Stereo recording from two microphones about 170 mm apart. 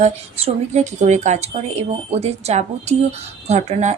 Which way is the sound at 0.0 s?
40° right (ahead or behind).